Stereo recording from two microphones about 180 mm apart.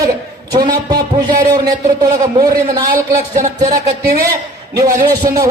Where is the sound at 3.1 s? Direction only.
45° right (ahead or behind).